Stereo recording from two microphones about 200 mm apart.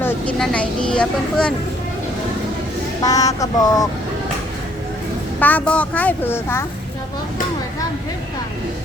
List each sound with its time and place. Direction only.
0.0 s speech: 5° left (ahead or behind)
3.0 s a woman's voice: 20° left (ahead or behind)
5.4 s a woman's voice: 10° left (ahead or behind)